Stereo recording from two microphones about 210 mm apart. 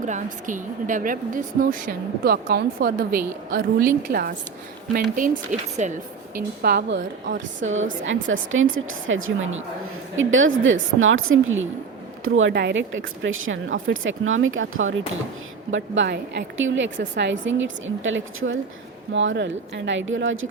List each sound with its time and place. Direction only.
0.0 s a woman's voice: 35° right (ahead or behind); by 7.4 s 55° right (ahead or behind)
8.0 s speech: 65° right (ahead or behind)
15.7 s speech: 60° right (ahead or behind)